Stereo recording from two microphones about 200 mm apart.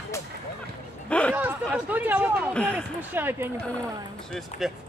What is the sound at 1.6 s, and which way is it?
Speech, 5° right (ahead or behind).